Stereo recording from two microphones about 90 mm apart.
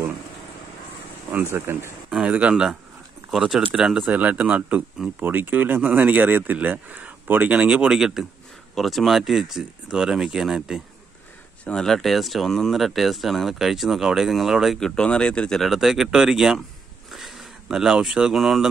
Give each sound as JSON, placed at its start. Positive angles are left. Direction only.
{"t": 1.3, "sound": "speech", "side_deg": -25}
{"t": 2.0, "sound": "speech", "side_deg": -10}
{"t": 4.0, "sound": "speech", "side_deg": -15}
{"t": 11.6, "sound": "speech", "side_deg": 5}
{"t": 14.8, "sound": "speech", "side_deg": 10}